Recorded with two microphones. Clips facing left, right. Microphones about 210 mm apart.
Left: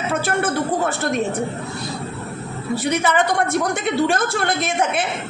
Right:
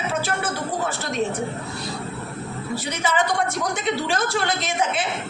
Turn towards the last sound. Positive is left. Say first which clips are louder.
# left 3 dB
turn(degrees=55)  # may be behind; listen again after turning